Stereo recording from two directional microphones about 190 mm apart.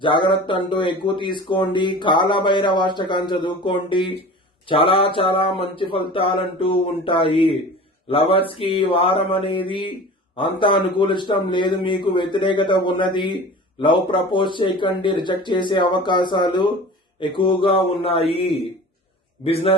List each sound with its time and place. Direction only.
0.0 s speech: 25° left (ahead or behind)
19.5 s a man's voice: 30° left (ahead or behind)